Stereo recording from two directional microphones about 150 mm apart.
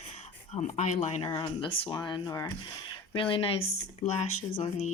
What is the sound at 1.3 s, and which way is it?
Speech, 30° left (ahead or behind).